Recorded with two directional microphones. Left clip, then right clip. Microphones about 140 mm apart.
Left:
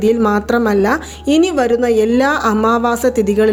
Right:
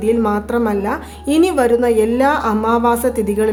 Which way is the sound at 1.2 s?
20° left (ahead or behind).